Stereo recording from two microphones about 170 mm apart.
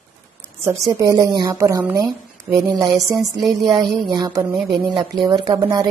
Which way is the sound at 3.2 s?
Centre (ahead or behind).